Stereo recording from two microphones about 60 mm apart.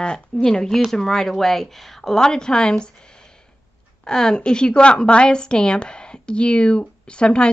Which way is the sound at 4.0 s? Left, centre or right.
Centre.